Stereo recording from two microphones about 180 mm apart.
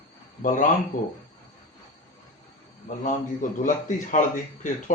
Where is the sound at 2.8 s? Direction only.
45° left (ahead or behind).